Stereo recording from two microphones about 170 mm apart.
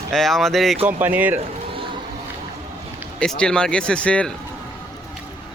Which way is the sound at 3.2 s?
5° left (ahead or behind).